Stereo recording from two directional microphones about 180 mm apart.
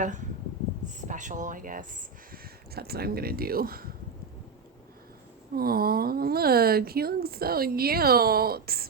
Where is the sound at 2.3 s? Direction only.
60° right (ahead or behind).